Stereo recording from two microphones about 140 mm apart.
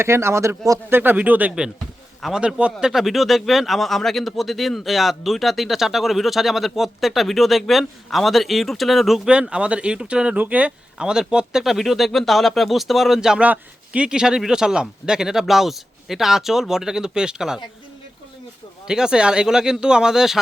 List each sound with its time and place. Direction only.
0.0 s a man's voice: 20° right (ahead or behind)
18.9 s speech: 5° right (ahead or behind)